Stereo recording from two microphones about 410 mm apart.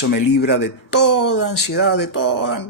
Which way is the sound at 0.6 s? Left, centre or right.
Left.